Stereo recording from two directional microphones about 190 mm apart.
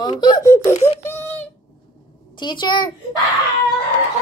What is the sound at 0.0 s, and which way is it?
Speech, 20° left (ahead or behind).